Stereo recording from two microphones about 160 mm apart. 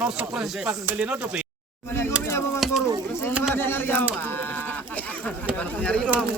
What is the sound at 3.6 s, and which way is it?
Speech, 15° left (ahead or behind).